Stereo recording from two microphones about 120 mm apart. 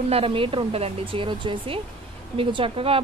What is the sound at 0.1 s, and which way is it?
Speech, 50° right (ahead or behind).